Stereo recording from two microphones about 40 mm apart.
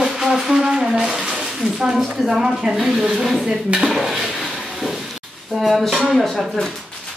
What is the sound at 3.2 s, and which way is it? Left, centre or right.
Speech, centre.